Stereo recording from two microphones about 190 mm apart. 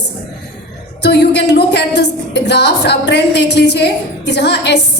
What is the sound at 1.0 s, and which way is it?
A woman's voice, 60° left (ahead or behind).